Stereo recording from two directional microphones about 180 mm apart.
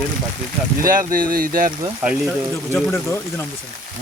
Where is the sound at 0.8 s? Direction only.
50° right (ahead or behind).